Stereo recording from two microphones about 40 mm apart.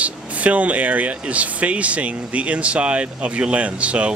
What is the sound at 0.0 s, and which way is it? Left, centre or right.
Speech, right.